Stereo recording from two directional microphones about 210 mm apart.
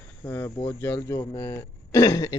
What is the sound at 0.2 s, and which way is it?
Speech, 15° left (ahead or behind).